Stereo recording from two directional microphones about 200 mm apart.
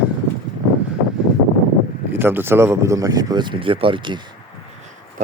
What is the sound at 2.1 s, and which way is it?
Speech, 10° right (ahead or behind).